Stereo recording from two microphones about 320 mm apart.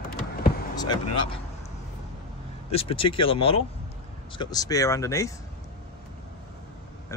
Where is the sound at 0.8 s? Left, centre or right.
Centre.